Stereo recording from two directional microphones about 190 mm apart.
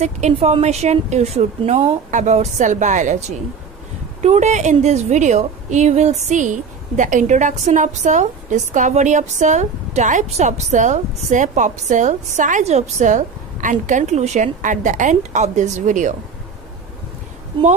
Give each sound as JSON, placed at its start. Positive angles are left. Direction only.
{"t": 0.0, "sound": "a woman's voice", "side_deg": -35}